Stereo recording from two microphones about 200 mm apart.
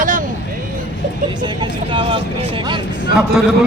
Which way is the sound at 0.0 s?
40° right (ahead or behind).